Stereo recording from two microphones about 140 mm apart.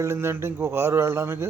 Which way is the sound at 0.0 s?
20° right (ahead or behind).